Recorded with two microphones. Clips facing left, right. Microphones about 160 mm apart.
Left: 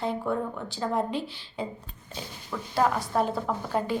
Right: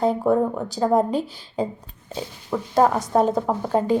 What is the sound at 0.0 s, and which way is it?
Speech, 40° right (ahead or behind).